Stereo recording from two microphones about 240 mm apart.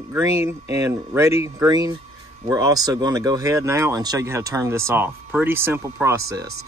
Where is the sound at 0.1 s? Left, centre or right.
Centre.